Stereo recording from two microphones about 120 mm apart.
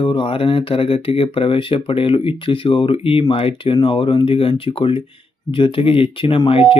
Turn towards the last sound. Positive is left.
turn(degrees=50)  # may be behind; listen again after turning